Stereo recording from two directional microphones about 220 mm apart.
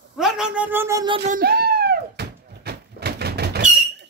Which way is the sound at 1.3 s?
45° right (ahead or behind).